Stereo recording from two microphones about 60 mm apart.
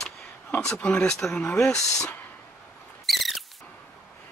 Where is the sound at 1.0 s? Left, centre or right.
Centre.